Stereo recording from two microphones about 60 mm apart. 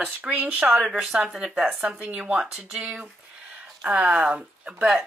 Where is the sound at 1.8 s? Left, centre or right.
Right.